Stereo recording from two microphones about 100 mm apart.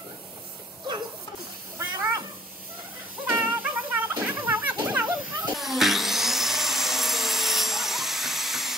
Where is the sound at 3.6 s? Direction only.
15° right (ahead or behind).